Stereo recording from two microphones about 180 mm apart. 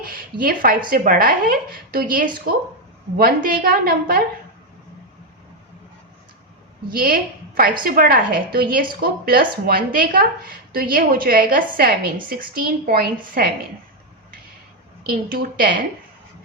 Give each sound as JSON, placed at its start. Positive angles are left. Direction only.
{"t": 0.0, "sound": "a woman's voice", "side_deg": -55}
{"t": 6.9, "sound": "a woman's voice", "side_deg": -55}
{"t": 15.0, "sound": "speech", "side_deg": -55}